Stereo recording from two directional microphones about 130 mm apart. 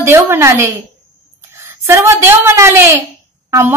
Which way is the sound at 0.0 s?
20° right (ahead or behind).